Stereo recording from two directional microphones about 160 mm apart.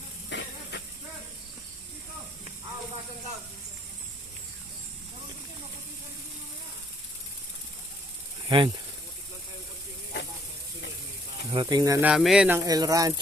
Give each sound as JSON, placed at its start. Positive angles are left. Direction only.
{"t": 0.3, "sound": "vehicle", "side_deg": 90}
{"t": 8.4, "sound": "speech", "side_deg": -30}
{"t": 11.5, "sound": "speech", "side_deg": -25}
{"t": 12.0, "sound": "speech", "side_deg": -5}
{"t": 12.5, "sound": "speech", "side_deg": -25}